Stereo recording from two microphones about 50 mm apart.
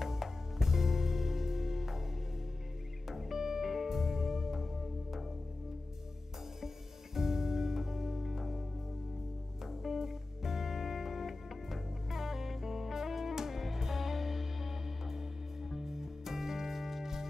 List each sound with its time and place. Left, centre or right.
0.0 s music: centre
3.1 s music: centre
7.2 s music: centre
9.7 s music: centre